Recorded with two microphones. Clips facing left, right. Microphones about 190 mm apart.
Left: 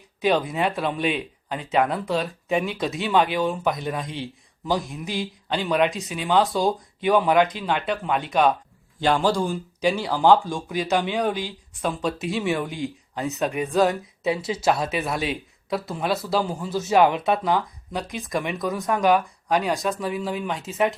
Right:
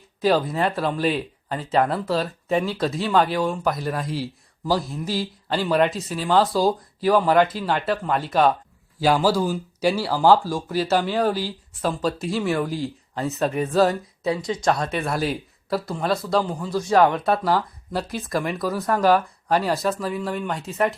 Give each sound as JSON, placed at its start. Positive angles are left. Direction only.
{"t": 0.3, "sound": "speech", "side_deg": 0}
{"t": 4.7, "sound": "speech", "side_deg": 15}
{"t": 5.5, "sound": "speech", "side_deg": 0}
{"t": 19.0, "sound": "speech", "side_deg": 15}
{"t": 19.6, "sound": "speech", "side_deg": -5}